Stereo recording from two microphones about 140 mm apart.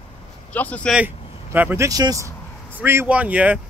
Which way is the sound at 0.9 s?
15° right (ahead or behind).